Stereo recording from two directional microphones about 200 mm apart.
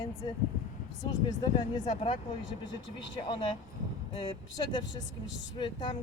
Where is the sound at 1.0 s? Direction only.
20° left (ahead or behind).